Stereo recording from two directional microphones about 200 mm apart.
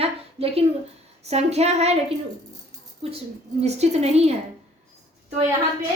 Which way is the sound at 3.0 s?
30° right (ahead or behind).